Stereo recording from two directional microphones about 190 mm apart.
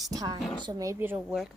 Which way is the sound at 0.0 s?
20° right (ahead or behind).